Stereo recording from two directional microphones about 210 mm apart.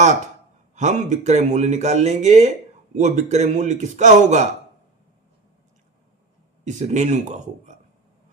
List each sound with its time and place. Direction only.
0.8 s speech: 35° right (ahead or behind)
6.7 s speech: 35° right (ahead or behind)